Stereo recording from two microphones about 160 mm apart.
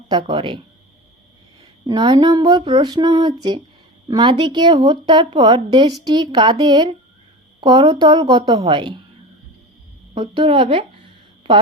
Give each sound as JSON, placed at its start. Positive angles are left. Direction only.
{"t": 0.1, "sound": "speech", "side_deg": -30}
{"t": 1.9, "sound": "speech", "side_deg": -25}
{"t": 10.2, "sound": "speech", "side_deg": -30}